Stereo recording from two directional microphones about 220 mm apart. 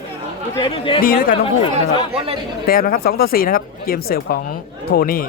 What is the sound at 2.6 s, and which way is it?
Speech, 40° left (ahead or behind).